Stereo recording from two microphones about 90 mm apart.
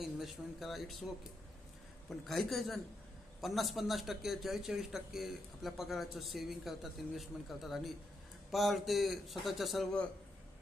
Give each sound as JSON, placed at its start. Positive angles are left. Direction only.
{"t": 0.0, "sound": "a man's voice", "side_deg": 0}